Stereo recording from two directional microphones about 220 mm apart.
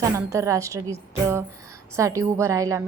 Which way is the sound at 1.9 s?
15° right (ahead or behind).